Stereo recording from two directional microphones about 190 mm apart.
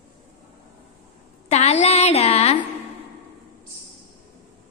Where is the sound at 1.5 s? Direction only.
35° left (ahead or behind).